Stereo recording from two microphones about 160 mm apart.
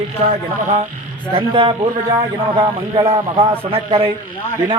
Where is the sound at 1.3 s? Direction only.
35° right (ahead or behind).